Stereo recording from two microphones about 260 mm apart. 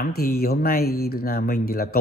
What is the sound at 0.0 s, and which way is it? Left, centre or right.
A man's voice, left.